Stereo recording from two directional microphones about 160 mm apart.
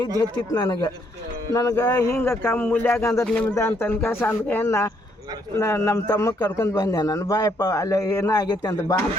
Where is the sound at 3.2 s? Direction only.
5° left (ahead or behind).